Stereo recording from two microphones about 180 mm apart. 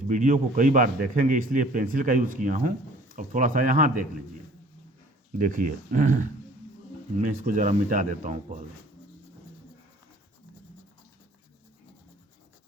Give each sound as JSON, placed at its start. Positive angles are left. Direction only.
{"t": 0.1, "sound": "a man's voice", "side_deg": -45}
{"t": 5.5, "sound": "a man's voice", "side_deg": -50}
{"t": 7.4, "sound": "a man's voice", "side_deg": -45}